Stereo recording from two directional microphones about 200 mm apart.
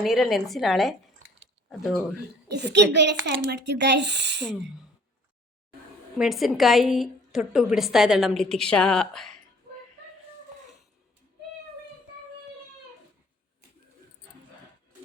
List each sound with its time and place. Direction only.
0.0 s a woman's voice: centre (ahead or behind)
2.7 s speech: 60° right (ahead or behind)
6.1 s a woman's voice: centre (ahead or behind)